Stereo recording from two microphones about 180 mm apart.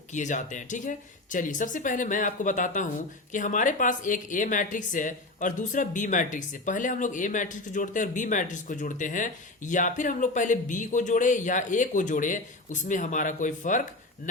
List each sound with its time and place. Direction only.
0.1 s speech: 45° left (ahead or behind)